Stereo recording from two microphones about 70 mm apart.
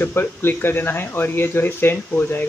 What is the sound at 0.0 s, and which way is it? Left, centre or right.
Speech, left.